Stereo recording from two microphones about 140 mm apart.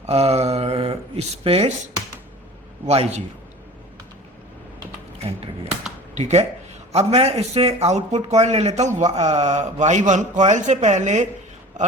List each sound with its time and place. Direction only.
0.0 s a sound: 50° right (ahead or behind)
2.8 s a man's voice: 50° right (ahead or behind)
6.1 s a man's voice: 55° right (ahead or behind)